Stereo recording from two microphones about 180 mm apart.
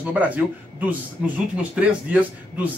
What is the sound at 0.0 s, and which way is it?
Speech, 10° right (ahead or behind).